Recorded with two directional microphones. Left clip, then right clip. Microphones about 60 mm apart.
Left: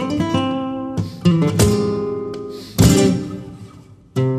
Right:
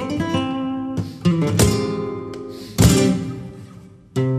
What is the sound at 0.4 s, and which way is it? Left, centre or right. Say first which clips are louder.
Music: left 3 dB; right.